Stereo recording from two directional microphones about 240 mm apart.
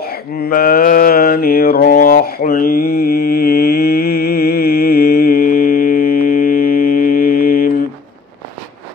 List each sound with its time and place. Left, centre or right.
0.0 s mantra: left